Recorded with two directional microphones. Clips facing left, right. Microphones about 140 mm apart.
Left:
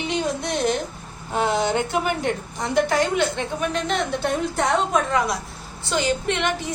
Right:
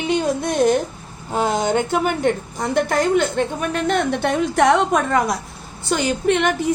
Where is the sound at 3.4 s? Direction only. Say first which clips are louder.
Right 4 dB; 55° right (ahead or behind); by 5.0 s 85° right.